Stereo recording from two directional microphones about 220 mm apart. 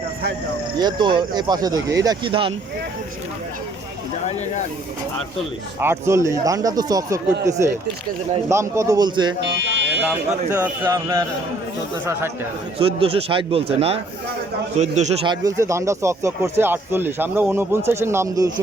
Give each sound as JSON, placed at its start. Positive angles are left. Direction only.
{"t": 0.8, "sound": "speech", "side_deg": -20}
{"t": 4.3, "sound": "speech", "side_deg": 30}
{"t": 5.8, "sound": "speech", "side_deg": -10}
{"t": 8.7, "sound": "speech", "side_deg": -15}
{"t": 9.6, "sound": "buzzer", "side_deg": -55}
{"t": 10.0, "sound": "speech", "side_deg": -5}
{"t": 12.8, "sound": "a man's voice", "side_deg": -25}
{"t": 15.3, "sound": "speech", "side_deg": -15}